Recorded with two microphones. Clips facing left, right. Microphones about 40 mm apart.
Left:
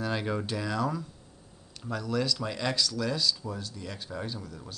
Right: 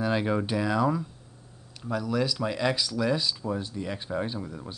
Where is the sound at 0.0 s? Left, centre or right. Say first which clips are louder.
Right 5 dB; centre.